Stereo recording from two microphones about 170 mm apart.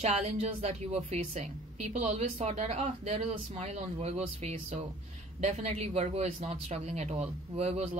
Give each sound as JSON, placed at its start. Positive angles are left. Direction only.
{"t": 0.0, "sound": "a woman's voice", "side_deg": -40}